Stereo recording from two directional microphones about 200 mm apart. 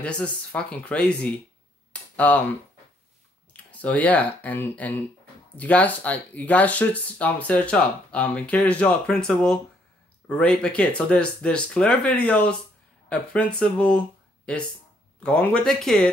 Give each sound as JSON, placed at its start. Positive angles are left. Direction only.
{"t": 0.0, "sound": "speech", "side_deg": 5}
{"t": 3.8, "sound": "speech", "side_deg": 5}